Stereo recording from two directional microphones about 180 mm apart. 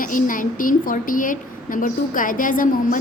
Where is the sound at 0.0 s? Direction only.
45° left (ahead or behind).